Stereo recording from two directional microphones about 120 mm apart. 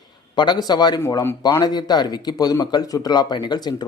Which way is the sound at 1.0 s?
25° left (ahead or behind).